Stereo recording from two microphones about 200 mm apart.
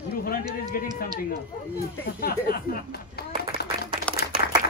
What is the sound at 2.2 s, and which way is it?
Speech, 45° left (ahead or behind).